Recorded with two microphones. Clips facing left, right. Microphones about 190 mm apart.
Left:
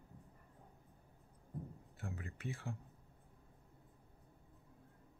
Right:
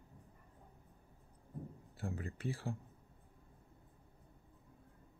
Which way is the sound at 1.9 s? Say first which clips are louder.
Right 6 dB; 35° right (ahead or behind).